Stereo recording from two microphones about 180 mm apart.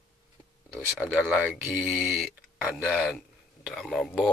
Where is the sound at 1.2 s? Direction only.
5° right (ahead or behind).